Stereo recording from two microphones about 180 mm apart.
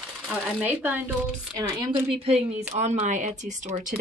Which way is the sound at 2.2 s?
35° right (ahead or behind).